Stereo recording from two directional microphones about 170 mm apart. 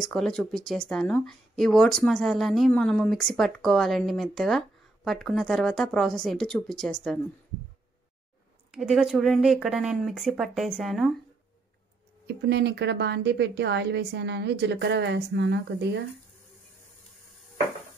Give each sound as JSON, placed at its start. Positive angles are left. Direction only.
{"t": 0.1, "sound": "speech", "side_deg": 5}
{"t": 8.7, "sound": "speech", "side_deg": 0}
{"t": 12.4, "sound": "a woman's voice", "side_deg": -75}